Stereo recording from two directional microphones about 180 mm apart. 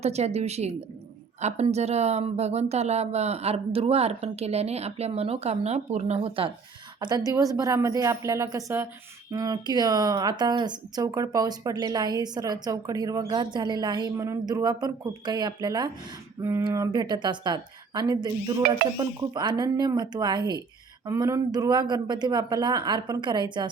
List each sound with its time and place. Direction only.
0.0 s speech: 35° right (ahead or behind)
7.3 s a woman's voice: 20° right (ahead or behind)